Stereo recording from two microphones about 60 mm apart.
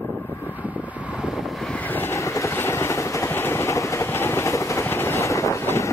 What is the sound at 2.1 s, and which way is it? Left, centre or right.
Vehicle, left.